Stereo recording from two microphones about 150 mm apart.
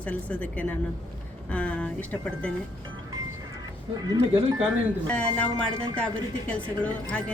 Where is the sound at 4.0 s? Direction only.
25° right (ahead or behind).